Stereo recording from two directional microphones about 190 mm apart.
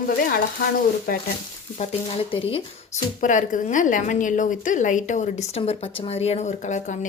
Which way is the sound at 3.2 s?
40° left (ahead or behind).